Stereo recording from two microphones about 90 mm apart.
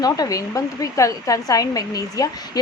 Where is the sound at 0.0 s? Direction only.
45° left (ahead or behind).